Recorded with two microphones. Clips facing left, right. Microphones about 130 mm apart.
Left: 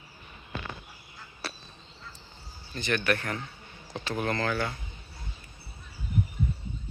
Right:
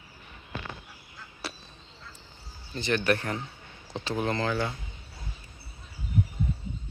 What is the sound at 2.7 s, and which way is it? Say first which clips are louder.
Speech: right 2 dB; 30° right (ahead or behind).